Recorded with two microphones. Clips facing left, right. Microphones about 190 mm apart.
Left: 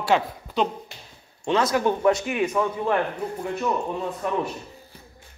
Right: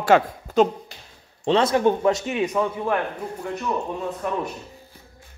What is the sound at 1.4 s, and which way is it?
Speech, 30° right (ahead or behind).